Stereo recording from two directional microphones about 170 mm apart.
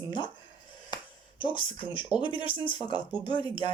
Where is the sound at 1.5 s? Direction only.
30° left (ahead or behind).